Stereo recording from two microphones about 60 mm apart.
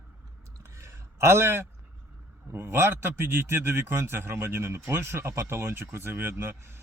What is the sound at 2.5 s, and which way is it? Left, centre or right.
A man's voice, right.